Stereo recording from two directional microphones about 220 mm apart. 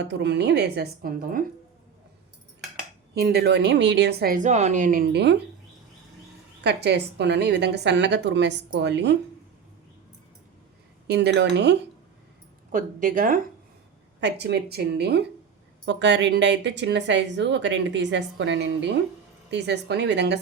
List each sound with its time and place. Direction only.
0.0 s speech: 50° right (ahead or behind)
3.2 s speech: 45° right (ahead or behind)
6.6 s speech: 50° right (ahead or behind)
11.1 s speech: 50° right (ahead or behind)
12.7 s speech: 35° right (ahead or behind)
14.2 s speech: 50° right (ahead or behind)